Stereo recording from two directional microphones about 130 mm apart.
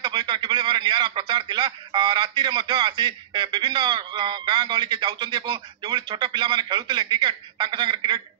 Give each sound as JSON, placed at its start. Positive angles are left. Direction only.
{"t": 0.0, "sound": "a man's voice", "side_deg": -35}